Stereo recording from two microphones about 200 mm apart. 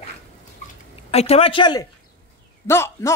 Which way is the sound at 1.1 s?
30° left (ahead or behind).